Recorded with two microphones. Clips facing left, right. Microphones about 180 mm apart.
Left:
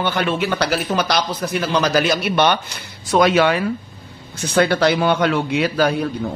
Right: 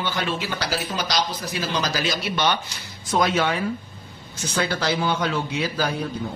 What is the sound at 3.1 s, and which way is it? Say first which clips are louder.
Speech: left 7 dB; 70° left (ahead or behind).